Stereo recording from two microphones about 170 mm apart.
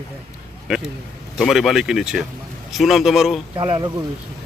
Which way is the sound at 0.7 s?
5° right (ahead or behind).